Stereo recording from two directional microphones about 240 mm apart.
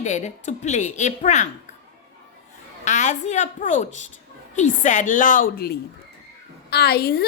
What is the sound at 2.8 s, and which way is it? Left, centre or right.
A woman's voice, left.